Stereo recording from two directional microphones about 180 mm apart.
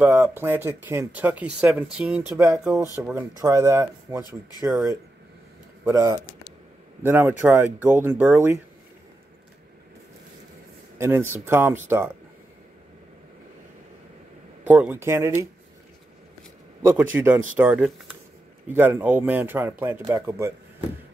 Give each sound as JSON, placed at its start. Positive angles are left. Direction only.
{"t": 0.0, "sound": "speech", "side_deg": -10}
{"t": 5.9, "sound": "speech", "side_deg": -15}
{"t": 11.0, "sound": "speech", "side_deg": -10}
{"t": 14.6, "sound": "speech", "side_deg": -10}
{"t": 16.8, "sound": "speech", "side_deg": -10}